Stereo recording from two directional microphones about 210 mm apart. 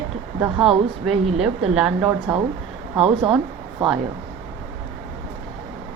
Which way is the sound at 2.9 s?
25° right (ahead or behind).